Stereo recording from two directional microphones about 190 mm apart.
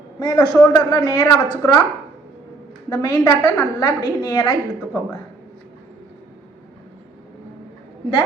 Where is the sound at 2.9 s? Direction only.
20° left (ahead or behind).